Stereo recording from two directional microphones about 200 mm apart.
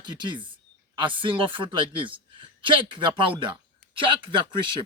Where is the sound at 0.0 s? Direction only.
20° right (ahead or behind).